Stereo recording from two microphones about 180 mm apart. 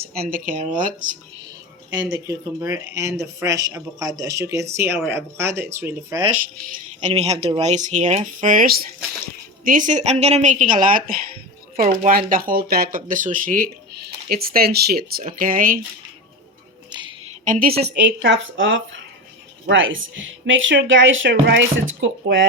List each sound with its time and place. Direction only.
0.0 s speech: 55° right (ahead or behind)
1.9 s speech: 20° right (ahead or behind)
7.0 s speech: 35° right (ahead or behind)
14.0 s speech: 60° right (ahead or behind)
15.4 s speech: 50° right (ahead or behind)
16.9 s a sound: 25° right (ahead or behind)
17.4 s a woman's voice: 45° right (ahead or behind)
17.8 s a woman's voice: 80° right